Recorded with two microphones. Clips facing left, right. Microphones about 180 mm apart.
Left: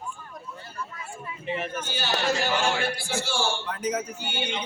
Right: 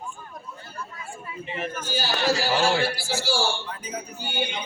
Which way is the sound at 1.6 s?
40° right (ahead or behind).